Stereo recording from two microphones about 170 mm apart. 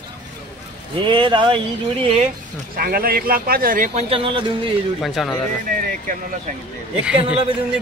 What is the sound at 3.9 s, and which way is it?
Speech, 35° right (ahead or behind).